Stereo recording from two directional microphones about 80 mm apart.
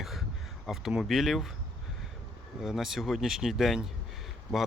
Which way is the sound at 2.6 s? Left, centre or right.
Centre.